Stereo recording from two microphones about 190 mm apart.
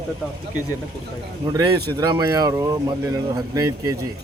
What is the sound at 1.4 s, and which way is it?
Speech, 20° right (ahead or behind).